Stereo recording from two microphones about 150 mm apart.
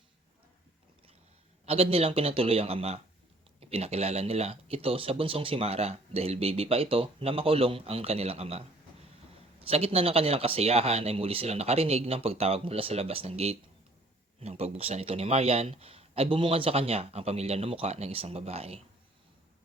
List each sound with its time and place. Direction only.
1.6 s speech: 40° right (ahead or behind)